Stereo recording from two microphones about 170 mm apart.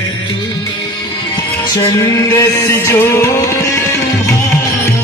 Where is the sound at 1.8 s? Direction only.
20° left (ahead or behind).